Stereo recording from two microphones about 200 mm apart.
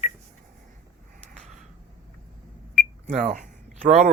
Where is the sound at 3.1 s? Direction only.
40° right (ahead or behind).